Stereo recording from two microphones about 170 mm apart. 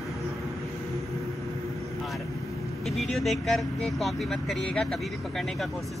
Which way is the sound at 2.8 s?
Centre (ahead or behind).